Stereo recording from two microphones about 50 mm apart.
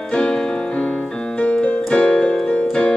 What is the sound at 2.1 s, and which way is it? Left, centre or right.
Music, centre.